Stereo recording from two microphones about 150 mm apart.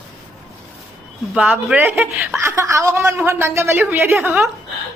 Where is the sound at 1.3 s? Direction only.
5° right (ahead or behind).